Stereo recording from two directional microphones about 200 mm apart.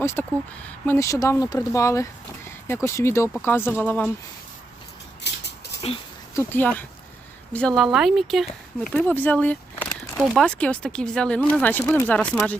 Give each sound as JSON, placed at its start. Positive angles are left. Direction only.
{"t": 0.0, "sound": "speech", "side_deg": 10}
{"t": 5.2, "sound": "dog", "side_deg": 60}
{"t": 6.3, "sound": "speech", "side_deg": 10}
{"t": 9.0, "sound": "a sound", "side_deg": 10}
{"t": 10.2, "sound": "speech", "side_deg": 5}